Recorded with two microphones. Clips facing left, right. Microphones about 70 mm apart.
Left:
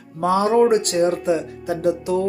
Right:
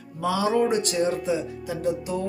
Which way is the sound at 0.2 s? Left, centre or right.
Left.